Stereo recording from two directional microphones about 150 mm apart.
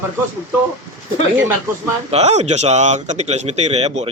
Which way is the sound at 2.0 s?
45° right (ahead or behind).